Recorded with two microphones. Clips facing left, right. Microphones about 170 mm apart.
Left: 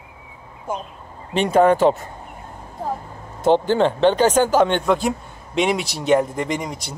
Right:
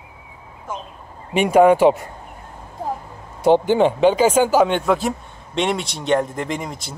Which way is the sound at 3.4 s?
15° right (ahead or behind).